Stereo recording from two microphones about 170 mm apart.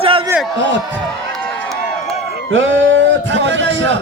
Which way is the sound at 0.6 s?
90° right.